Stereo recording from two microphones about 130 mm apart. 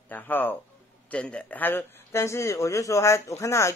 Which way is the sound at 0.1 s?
15° left (ahead or behind).